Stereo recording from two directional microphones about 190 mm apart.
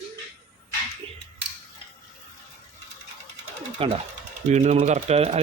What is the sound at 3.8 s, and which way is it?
Speech, 30° right (ahead or behind).